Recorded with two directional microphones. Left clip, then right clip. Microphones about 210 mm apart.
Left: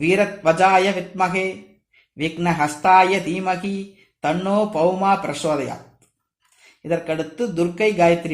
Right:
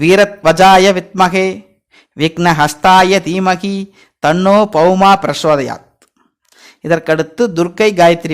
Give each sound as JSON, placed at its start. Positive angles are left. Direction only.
{"t": 0.0, "sound": "speech", "side_deg": -40}
{"t": 6.8, "sound": "speech", "side_deg": -45}